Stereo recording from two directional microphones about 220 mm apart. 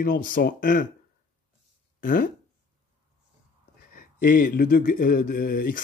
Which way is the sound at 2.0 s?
40° left (ahead or behind).